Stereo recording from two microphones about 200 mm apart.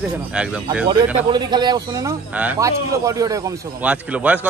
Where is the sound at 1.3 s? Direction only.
20° right (ahead or behind).